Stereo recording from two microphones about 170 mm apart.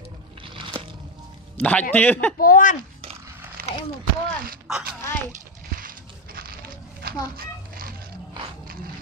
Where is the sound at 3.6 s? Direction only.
60° right (ahead or behind).